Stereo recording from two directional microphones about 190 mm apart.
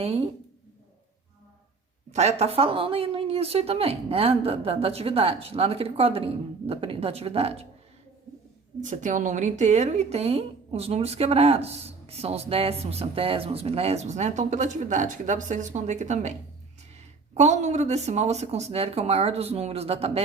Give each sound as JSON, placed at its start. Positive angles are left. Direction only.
{"t": 0.0, "sound": "a woman's voice", "side_deg": -30}
{"t": 2.1, "sound": "a woman's voice", "side_deg": -35}
{"t": 8.8, "sound": "a woman's voice", "side_deg": -40}
{"t": 17.3, "sound": "a woman's voice", "side_deg": -40}